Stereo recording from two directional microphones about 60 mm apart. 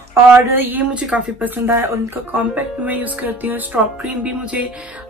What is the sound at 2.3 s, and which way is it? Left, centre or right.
Speech, right.